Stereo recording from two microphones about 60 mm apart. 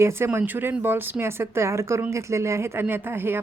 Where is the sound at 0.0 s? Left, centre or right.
Right.